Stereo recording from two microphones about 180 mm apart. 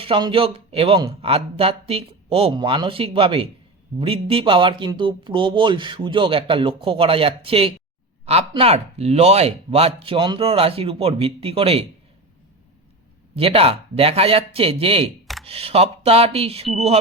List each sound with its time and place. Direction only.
0.0 s speech: 30° right (ahead or behind)
13.3 s speech: 30° right (ahead or behind)